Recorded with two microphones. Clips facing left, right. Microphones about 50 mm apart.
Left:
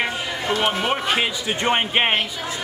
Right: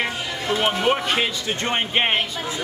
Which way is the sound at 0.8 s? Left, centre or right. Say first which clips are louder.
Right 1 dB; centre.